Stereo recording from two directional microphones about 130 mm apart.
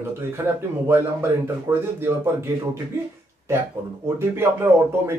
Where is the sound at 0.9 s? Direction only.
15° right (ahead or behind).